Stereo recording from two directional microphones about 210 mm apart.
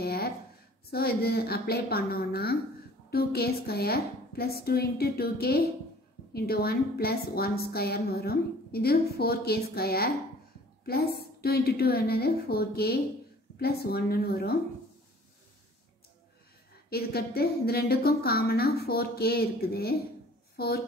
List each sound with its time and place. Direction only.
0.0 s a sound: 45° left (ahead or behind)
0.9 s a woman's voice: 45° left (ahead or behind)
11.4 s a woman's voice: 45° left (ahead or behind)
16.9 s a woman's voice: 50° left (ahead or behind)